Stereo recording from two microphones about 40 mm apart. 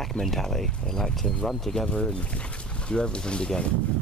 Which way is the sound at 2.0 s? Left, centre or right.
Left.